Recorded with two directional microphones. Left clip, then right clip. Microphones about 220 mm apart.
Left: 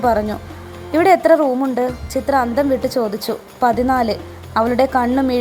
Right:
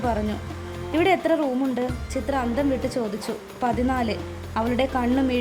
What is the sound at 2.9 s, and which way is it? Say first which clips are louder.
A woman's voice: left 8 dB; 15° left (ahead or behind).